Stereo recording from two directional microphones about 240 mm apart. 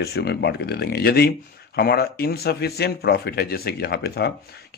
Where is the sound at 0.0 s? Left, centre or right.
Left.